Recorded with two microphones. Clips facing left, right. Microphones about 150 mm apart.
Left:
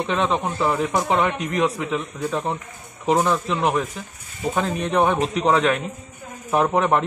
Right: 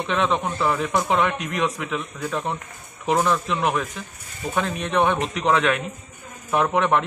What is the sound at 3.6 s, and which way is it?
Speech, 35° left (ahead or behind).